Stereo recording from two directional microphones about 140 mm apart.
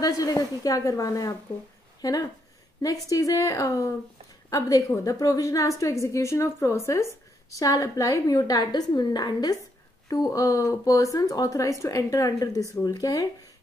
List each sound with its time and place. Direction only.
0.0 s a woman's voice: 25° left (ahead or behind)